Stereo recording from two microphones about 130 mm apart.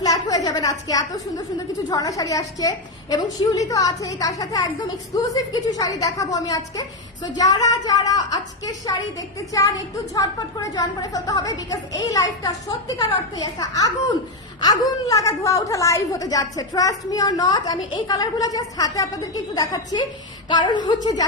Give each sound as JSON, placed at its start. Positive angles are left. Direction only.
{"t": 0.0, "sound": "a woman's voice", "side_deg": 30}